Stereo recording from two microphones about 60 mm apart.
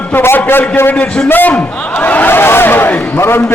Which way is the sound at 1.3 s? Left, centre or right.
Left.